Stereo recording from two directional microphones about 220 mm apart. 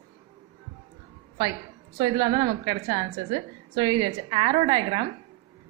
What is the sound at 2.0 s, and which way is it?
A woman's voice, 20° right (ahead or behind).